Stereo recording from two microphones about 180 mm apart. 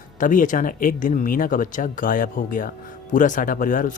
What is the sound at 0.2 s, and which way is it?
Speech, 45° left (ahead or behind).